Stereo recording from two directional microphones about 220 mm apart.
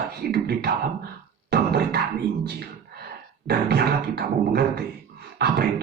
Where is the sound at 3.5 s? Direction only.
45° right (ahead or behind).